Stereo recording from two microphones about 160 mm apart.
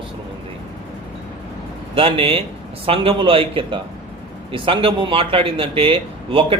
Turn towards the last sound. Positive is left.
turn(degrees=-35)  # may be behind; listen again after turning